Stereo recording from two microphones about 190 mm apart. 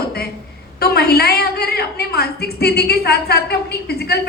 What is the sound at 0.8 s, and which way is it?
A woman's voice, 55° left (ahead or behind).